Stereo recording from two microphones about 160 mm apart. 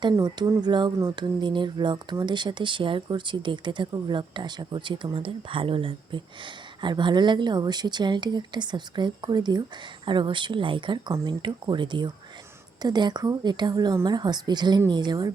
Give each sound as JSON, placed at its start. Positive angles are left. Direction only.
{"t": 0.0, "sound": "speech", "side_deg": -25}